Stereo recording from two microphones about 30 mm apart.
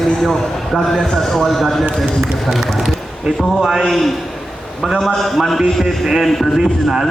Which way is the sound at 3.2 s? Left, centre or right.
Centre.